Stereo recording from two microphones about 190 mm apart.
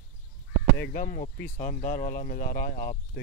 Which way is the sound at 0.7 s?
50° left (ahead or behind).